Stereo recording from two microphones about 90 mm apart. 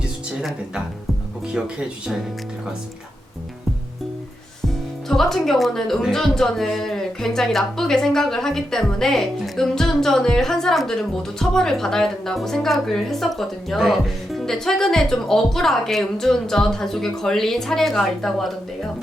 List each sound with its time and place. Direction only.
0.3 s speech: 10° right (ahead or behind)
5.0 s a woman's voice: 5° left (ahead or behind)